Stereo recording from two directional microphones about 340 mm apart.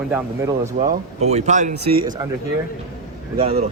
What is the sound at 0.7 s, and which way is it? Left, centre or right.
A man's voice, centre.